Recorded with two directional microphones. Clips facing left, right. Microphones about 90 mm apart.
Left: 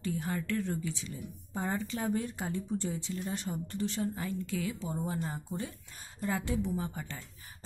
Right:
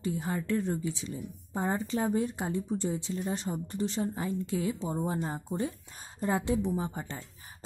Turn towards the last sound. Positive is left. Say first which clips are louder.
# right 3 dB
turn(degrees=-25)  # may be behind; listen again after turning